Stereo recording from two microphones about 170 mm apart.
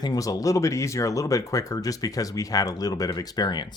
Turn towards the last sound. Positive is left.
turn(degrees=25)  # may be behind; listen again after turning